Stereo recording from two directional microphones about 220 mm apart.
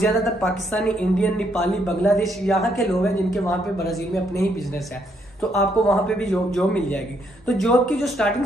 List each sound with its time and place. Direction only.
0.0 s speech: centre (ahead or behind)
5.6 s speech: 5° left (ahead or behind)